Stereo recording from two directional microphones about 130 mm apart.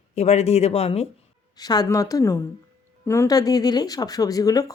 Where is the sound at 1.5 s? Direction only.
30° left (ahead or behind).